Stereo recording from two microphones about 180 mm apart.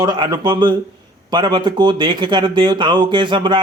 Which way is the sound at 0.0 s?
25° right (ahead or behind).